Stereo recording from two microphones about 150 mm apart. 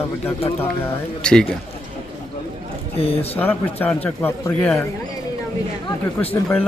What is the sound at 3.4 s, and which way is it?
A man's voice, 10° left (ahead or behind).